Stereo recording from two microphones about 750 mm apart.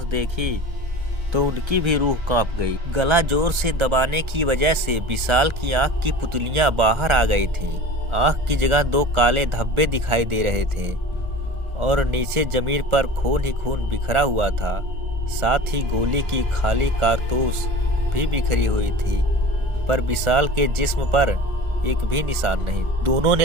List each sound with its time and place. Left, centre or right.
0.1 s speech: right